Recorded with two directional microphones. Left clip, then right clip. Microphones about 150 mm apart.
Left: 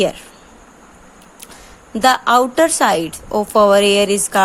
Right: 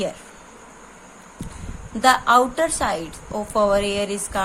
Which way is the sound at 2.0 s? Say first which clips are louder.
Left 3 dB; 50° left (ahead or behind).